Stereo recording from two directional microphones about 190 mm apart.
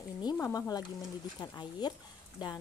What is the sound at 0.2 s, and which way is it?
Speech, 20° left (ahead or behind).